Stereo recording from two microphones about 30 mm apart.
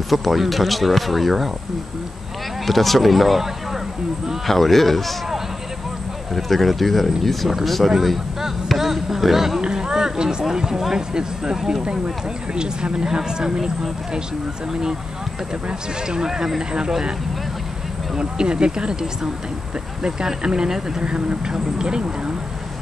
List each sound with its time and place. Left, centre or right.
0.1 s speech: centre
2.6 s speech: centre
4.5 s speech: centre
6.3 s speech: centre
8.6 s a sound: centre
9.6 s a sound: right
11.0 s speech: right
12.5 s speech: right
14.7 s speech: right
16.1 s speech: right
18.1 s speech: right
20.0 s speech: right